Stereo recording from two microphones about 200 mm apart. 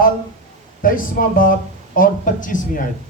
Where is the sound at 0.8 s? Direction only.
45° left (ahead or behind).